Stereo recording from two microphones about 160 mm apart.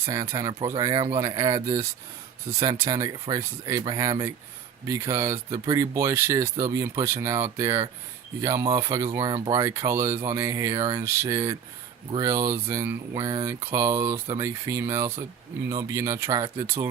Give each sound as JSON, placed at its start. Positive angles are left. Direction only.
{"t": 0.0, "sound": "speech", "side_deg": -20}
{"t": 9.0, "sound": "speech", "side_deg": -35}
{"t": 9.5, "sound": "speech", "side_deg": -20}